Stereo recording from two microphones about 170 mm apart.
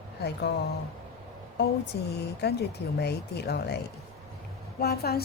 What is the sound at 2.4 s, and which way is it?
Speech, 75° left (ahead or behind).